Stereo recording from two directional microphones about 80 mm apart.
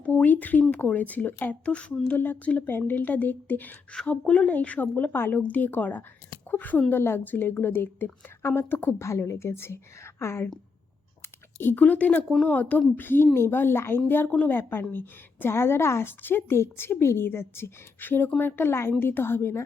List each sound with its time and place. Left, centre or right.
0.0 s a woman's voice: left
2.0 s a woman's voice: left
11.5 s a woman's voice: left